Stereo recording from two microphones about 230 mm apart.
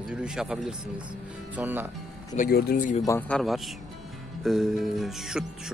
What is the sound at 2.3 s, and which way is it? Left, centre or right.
Speech, left.